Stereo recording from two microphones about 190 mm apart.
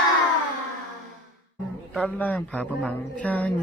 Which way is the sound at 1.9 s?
5° left (ahead or behind).